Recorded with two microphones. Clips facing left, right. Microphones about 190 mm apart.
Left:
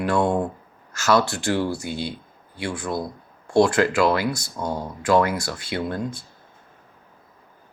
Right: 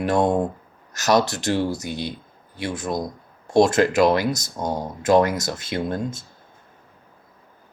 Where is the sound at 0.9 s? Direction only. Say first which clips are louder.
Right 1 dB; 20° right (ahead or behind).